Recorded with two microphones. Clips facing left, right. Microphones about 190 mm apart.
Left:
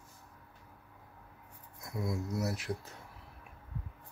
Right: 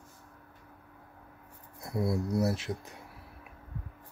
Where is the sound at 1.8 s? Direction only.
35° right (ahead or behind); by 3.0 s 20° right (ahead or behind).